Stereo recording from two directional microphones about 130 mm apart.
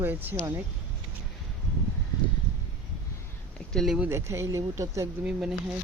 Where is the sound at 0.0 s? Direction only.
15° right (ahead or behind).